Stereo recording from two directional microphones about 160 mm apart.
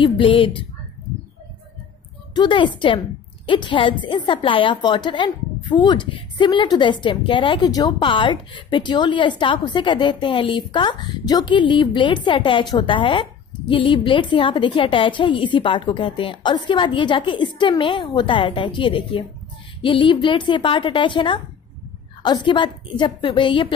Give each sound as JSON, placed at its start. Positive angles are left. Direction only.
{"t": 0.0, "sound": "a woman's voice", "side_deg": 30}
{"t": 2.3, "sound": "a woman's voice", "side_deg": 30}